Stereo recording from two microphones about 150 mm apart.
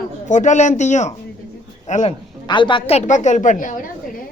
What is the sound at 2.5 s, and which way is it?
A man's voice, 35° left (ahead or behind).